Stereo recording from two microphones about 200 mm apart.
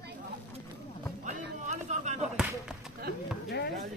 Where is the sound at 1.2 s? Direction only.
35° right (ahead or behind).